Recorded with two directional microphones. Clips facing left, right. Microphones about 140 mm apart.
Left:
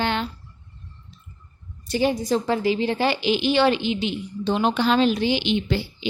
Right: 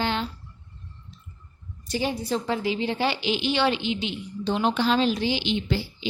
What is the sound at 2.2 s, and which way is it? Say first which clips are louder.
A woman's voice: left 4 dB; 40° left (ahead or behind).